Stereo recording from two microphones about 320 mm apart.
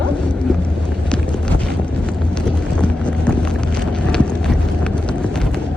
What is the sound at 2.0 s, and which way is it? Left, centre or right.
Vehicle, centre.